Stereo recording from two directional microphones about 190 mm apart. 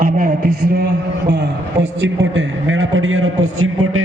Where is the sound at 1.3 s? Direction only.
70° right (ahead or behind); by 4.0 s 90° right.